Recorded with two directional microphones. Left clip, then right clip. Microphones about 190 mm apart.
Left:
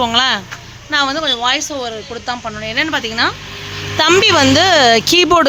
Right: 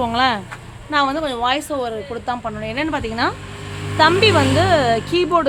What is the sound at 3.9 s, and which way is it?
Speech, 30° left (ahead or behind).